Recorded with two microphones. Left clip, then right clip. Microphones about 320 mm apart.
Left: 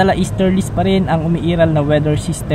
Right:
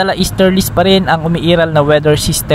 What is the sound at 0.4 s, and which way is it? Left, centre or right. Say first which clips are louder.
A man's voice: right 6 dB; right.